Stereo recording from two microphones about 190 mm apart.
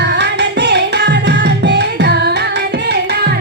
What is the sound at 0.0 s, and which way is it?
Music, 65° right (ahead or behind).